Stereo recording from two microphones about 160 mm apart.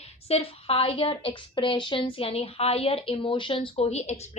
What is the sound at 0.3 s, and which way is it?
A woman's voice, 40° left (ahead or behind).